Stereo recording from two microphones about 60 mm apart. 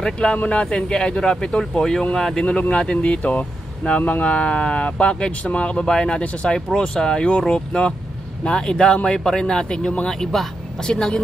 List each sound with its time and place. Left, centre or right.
0.0 s speech: centre
2.4 s speech: centre